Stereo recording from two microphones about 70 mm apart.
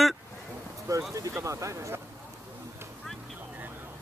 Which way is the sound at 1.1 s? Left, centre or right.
Right.